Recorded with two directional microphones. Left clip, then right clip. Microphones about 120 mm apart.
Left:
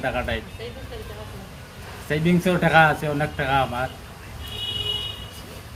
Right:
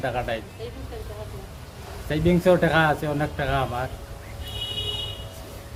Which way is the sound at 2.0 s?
25° right (ahead or behind).